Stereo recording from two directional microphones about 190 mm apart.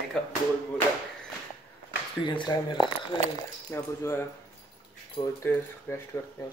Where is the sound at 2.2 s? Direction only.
25° left (ahead or behind).